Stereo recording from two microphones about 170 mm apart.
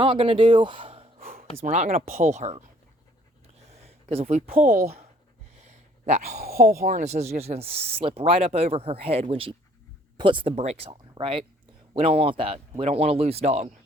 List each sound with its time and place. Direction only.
0.0 s a man's voice: 30° right (ahead or behind)
1.6 s speech: 50° right (ahead or behind)
3.7 s a sound: 40° right (ahead or behind)
4.4 s speech: 40° right (ahead or behind)
5.6 s a sound: 40° right (ahead or behind)
6.4 s speech: 60° right (ahead or behind); by 13.7 s 40° right (ahead or behind)